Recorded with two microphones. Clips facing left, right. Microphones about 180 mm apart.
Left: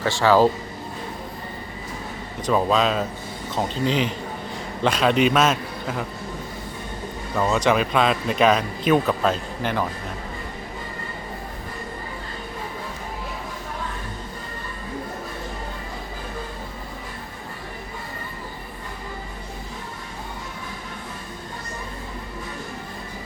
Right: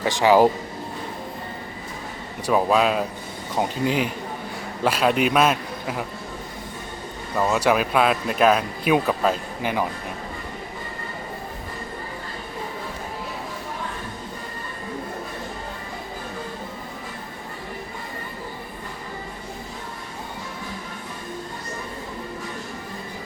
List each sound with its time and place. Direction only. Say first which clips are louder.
0.0 s speech: right 1 dB; 15° right (ahead or behind)
2.5 s speech: right 1 dB; 10° right (ahead or behind)
7.3 s speech: even; 5° right (ahead or behind)